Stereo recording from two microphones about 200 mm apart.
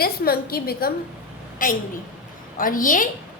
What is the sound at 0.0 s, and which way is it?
A woman's voice, 50° left (ahead or behind).